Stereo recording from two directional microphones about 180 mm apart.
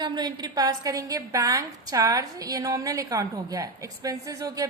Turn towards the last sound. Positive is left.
turn(degrees=-20)  # may be behind; listen again after turning